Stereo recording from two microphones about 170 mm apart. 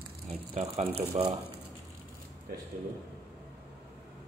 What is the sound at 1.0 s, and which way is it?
Speech, 25° right (ahead or behind).